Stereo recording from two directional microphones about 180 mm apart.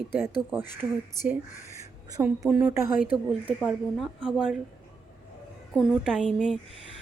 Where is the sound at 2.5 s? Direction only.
10° right (ahead or behind).